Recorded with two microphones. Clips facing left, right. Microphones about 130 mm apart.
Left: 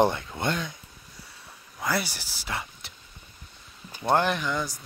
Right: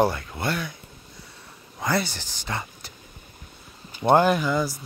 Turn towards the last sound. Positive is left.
turn(degrees=-5)  # may be behind; listen again after turning